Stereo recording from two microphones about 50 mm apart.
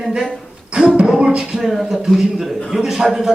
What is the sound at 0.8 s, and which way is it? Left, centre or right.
Speech, right.